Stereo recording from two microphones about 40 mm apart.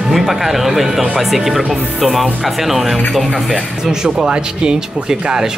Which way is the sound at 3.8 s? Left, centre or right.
Centre.